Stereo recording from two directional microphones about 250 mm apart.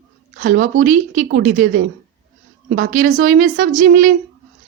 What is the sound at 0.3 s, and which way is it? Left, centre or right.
Speech, right.